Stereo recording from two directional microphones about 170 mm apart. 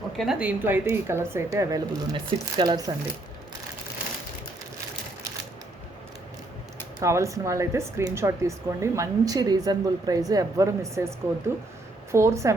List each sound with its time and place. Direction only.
0.2 s speech: 5° right (ahead or behind); by 2.9 s 20° right (ahead or behind)
7.0 s speech: 15° right (ahead or behind)